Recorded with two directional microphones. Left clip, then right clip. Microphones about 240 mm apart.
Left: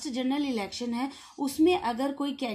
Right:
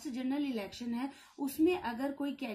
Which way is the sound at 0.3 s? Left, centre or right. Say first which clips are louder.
Left 5 dB; left.